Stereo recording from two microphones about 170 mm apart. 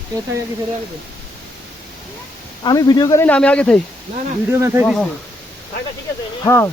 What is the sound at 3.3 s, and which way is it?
Speech, 5° left (ahead or behind).